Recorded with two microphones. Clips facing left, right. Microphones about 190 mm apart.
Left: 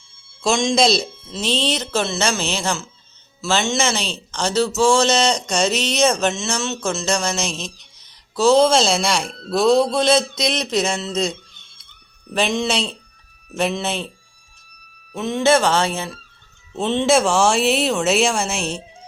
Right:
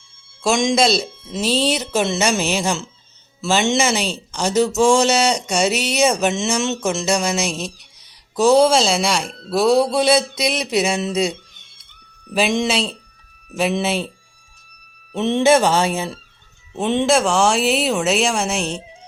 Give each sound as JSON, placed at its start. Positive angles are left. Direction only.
{"t": 0.4, "sound": "a woman's voice", "side_deg": -15}
{"t": 15.1, "sound": "a man's voice", "side_deg": -25}
{"t": 15.4, "sound": "speech", "side_deg": -15}
{"t": 17.1, "sound": "a woman's voice", "side_deg": 0}